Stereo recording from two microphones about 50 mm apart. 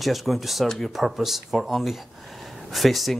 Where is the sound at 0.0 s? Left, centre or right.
Centre.